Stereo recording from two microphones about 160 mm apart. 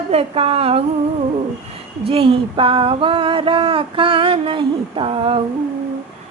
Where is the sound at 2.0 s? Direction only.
35° right (ahead or behind).